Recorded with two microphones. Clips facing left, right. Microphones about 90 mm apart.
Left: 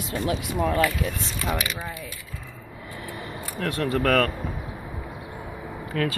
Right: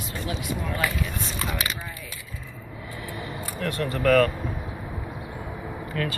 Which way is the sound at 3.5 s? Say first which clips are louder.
Left 3 dB; 85° left.